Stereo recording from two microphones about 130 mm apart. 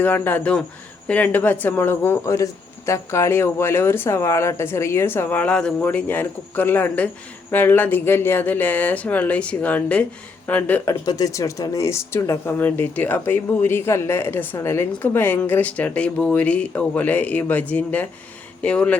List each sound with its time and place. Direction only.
0.0 s speech: 15° left (ahead or behind)
11.0 s speech: 30° left (ahead or behind); by 18.9 s 10° left (ahead or behind)